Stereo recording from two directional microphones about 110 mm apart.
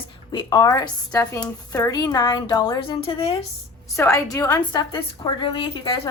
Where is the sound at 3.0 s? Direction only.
60° left (ahead or behind).